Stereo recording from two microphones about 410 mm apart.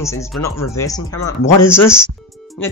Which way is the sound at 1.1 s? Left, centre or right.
Left.